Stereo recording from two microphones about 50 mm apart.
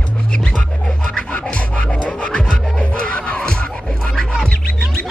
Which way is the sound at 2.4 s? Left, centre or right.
Centre.